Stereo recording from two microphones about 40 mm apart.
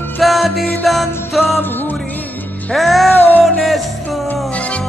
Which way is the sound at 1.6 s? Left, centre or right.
Left.